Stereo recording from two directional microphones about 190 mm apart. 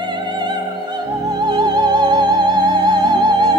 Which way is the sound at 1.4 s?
25° right (ahead or behind).